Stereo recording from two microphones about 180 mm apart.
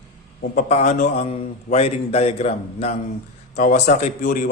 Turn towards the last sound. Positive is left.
turn(degrees=45)  # may be behind; listen again after turning